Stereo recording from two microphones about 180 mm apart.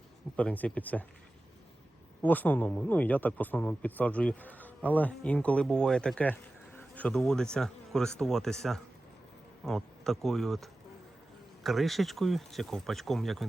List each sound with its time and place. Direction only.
0.3 s speech: 10° left (ahead or behind)
2.2 s speech: 10° left (ahead or behind)